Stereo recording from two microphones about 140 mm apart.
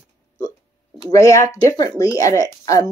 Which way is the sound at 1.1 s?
25° left (ahead or behind).